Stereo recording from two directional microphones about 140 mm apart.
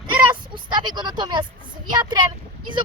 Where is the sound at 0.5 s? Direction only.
35° right (ahead or behind).